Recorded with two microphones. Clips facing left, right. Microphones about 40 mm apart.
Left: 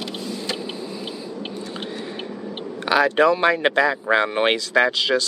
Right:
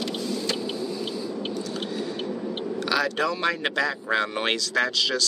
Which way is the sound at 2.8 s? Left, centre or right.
Left.